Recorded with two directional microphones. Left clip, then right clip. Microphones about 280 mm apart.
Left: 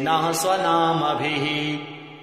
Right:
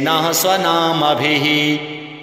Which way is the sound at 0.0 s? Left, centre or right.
Right.